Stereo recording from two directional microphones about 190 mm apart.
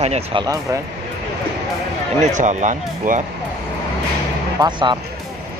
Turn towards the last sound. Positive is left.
turn(degrees=-25)  # may be behind; listen again after turning